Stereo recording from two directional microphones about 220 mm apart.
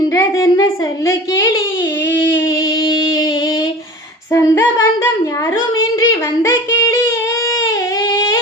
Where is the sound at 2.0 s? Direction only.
55° left (ahead or behind).